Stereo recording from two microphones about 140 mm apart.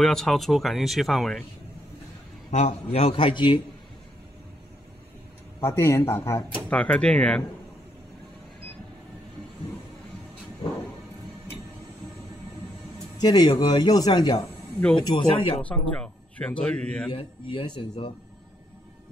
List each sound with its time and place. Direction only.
0.0 s speech: 5° left (ahead or behind)
2.5 s a man's voice: 50° left (ahead or behind)
5.6 s speech: 20° left (ahead or behind)
6.7 s a man's voice: 10° left (ahead or behind)
13.2 s a man's voice: 30° left (ahead or behind)
15.6 s a man's voice: 10° left (ahead or behind)
17.1 s a man's voice: 40° left (ahead or behind)